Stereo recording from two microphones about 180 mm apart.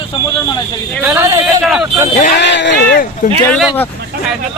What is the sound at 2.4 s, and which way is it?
Speech, 75° left (ahead or behind).